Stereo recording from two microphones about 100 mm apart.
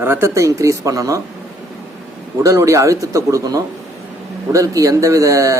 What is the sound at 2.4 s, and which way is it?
Speech, 30° right (ahead or behind).